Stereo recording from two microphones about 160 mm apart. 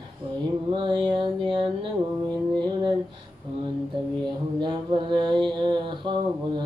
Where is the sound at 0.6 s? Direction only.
30° right (ahead or behind).